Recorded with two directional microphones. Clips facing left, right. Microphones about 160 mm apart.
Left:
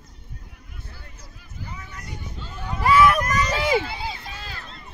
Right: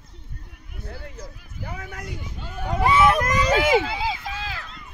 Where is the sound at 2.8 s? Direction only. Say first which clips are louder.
Left 1 dB; 25° right (ahead or behind).